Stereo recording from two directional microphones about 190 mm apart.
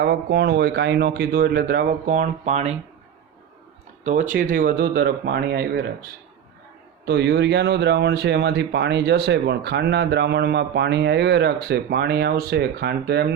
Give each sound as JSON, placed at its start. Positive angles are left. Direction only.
{"t": 0.0, "sound": "speech", "side_deg": -60}
{"t": 4.0, "sound": "speech", "side_deg": -40}